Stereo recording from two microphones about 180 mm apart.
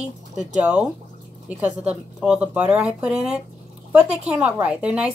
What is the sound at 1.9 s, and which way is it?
A woman's voice, 5° right (ahead or behind).